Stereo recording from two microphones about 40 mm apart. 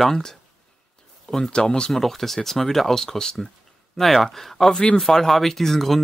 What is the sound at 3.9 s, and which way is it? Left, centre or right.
Speech, centre.